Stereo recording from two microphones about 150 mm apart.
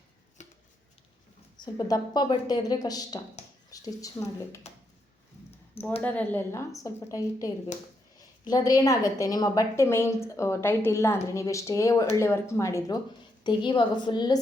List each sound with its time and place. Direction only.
0.4 s a sound: 55° left (ahead or behind)
1.5 s a woman's voice: 30° left (ahead or behind)
6.0 s a woman's voice: 10° left (ahead or behind)
13.4 s a woman's voice: 30° left (ahead or behind)